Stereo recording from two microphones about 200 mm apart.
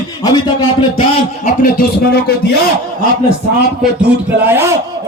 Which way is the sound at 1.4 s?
45° left (ahead or behind).